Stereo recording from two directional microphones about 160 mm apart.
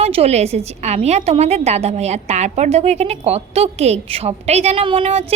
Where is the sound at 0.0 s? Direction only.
40° right (ahead or behind).